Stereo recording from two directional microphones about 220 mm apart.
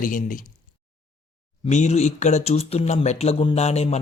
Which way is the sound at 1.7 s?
30° left (ahead or behind).